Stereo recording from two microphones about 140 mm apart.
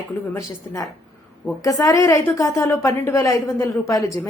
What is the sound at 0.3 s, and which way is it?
A woman's voice, 25° left (ahead or behind).